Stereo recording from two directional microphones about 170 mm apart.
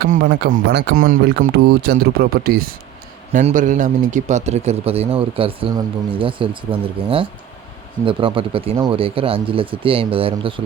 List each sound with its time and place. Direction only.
0.7 s speech: 80° right; by 2.7 s 60° right (ahead or behind)
3.4 s speech: 50° right (ahead or behind); by 10.5 s 30° right (ahead or behind)